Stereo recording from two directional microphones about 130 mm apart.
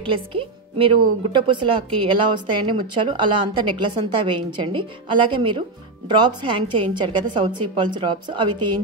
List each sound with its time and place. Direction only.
0.0 s a woman's voice: 40° right (ahead or behind)